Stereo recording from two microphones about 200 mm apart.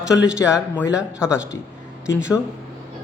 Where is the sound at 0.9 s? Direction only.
5° right (ahead or behind).